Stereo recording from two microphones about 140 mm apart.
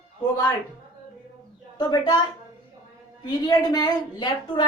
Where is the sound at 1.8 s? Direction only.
30° left (ahead or behind).